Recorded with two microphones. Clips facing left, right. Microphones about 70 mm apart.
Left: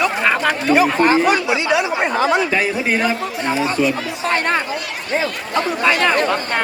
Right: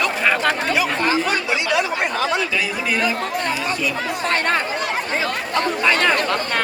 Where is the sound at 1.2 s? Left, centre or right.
Centre.